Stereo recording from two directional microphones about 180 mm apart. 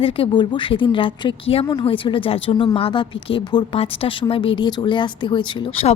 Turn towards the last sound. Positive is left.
turn(degrees=30)  # may be behind; listen again after turning